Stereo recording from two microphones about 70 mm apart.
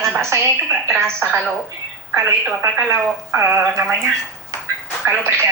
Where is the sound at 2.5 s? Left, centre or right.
Right.